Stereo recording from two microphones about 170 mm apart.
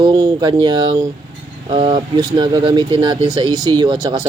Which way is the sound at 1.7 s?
30° right (ahead or behind).